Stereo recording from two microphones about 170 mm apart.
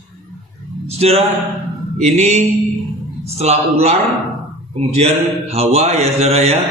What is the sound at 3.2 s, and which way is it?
Speech, 40° right (ahead or behind).